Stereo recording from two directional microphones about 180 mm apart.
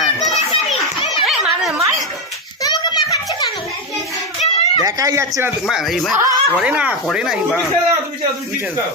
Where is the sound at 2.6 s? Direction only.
20° left (ahead or behind).